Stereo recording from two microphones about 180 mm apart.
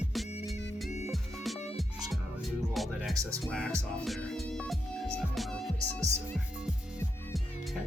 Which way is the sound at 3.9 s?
5° left (ahead or behind).